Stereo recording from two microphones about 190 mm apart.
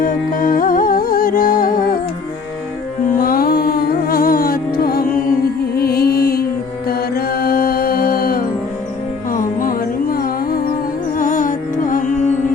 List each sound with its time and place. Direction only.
0.0 s music: 45° left (ahead or behind)
3.2 s music: 50° left (ahead or behind)